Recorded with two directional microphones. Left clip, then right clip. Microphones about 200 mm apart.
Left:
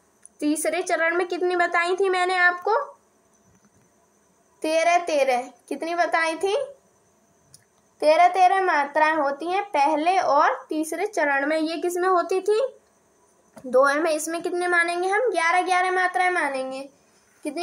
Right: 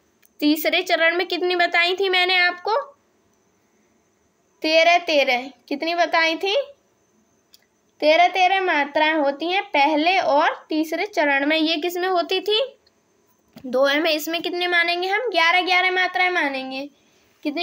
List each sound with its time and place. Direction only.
0.4 s a woman's voice: 45° right (ahead or behind)
4.6 s a woman's voice: 50° right (ahead or behind)
13.8 s a woman's voice: 40° right (ahead or behind)